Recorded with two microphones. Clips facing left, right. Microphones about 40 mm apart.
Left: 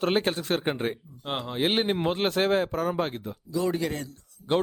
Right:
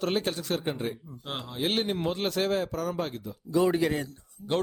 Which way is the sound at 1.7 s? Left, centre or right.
Left.